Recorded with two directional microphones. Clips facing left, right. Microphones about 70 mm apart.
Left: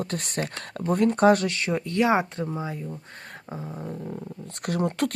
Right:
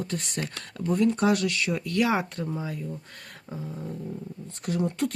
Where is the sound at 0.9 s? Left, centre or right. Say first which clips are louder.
Left 4 dB; left.